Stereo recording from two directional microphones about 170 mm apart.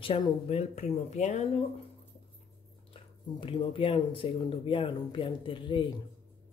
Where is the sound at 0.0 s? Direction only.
30° left (ahead or behind).